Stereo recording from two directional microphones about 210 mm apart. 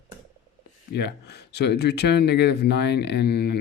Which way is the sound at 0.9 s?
55° left (ahead or behind).